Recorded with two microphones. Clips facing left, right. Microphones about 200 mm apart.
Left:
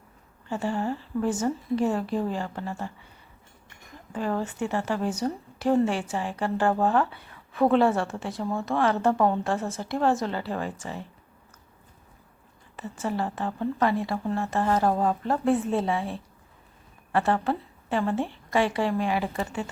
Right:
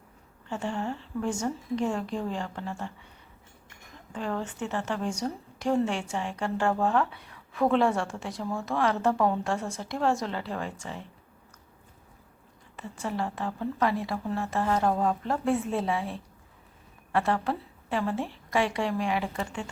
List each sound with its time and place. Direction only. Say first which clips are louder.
0.4 s a woman's voice: left 4 dB; 5° left (ahead or behind)
4.1 s a woman's voice: left 4 dB; 5° left (ahead or behind)
12.7 s a woman's voice: left 3 dB; centre (ahead or behind)